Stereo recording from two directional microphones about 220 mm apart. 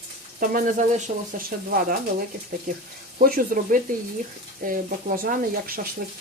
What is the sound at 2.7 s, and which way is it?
Speech, 35° right (ahead or behind).